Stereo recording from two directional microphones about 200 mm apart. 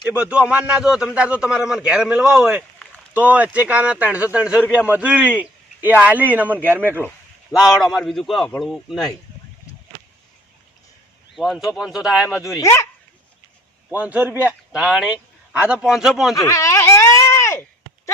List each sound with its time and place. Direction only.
0.1 s a man's voice: 5° right (ahead or behind)
7.5 s a man's voice: centre (ahead or behind)
11.3 s a man's voice: centre (ahead or behind)
12.5 s speech: 15° left (ahead or behind)
13.9 s a man's voice: 10° right (ahead or behind)
16.3 s a sound: 15° left (ahead or behind)